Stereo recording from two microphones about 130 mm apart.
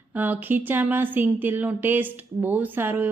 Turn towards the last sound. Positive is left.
turn(degrees=-15)  # may be behind; listen again after turning